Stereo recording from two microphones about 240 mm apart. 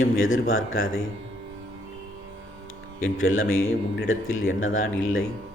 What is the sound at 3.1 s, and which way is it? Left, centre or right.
Speech, left.